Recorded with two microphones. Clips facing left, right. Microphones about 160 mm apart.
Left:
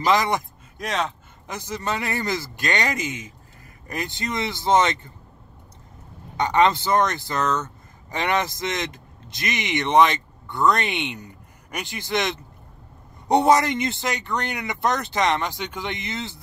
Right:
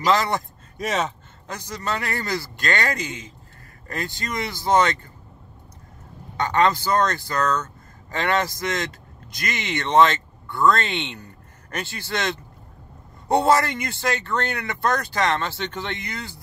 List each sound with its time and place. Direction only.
0.0 s speech: 15° left (ahead or behind)
0.7 s speech: centre (ahead or behind)
1.7 s speech: 20° left (ahead or behind)
6.3 s speech: 20° left (ahead or behind)